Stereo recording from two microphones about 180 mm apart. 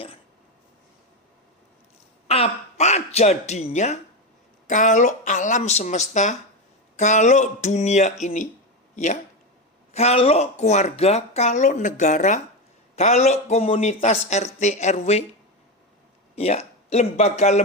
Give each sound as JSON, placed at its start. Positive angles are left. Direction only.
{"t": 2.2, "sound": "speech", "side_deg": 35}
{"t": 9.9, "sound": "speech", "side_deg": 35}
{"t": 16.3, "sound": "speech", "side_deg": 35}